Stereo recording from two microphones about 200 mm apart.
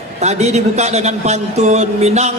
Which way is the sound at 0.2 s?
35° right (ahead or behind).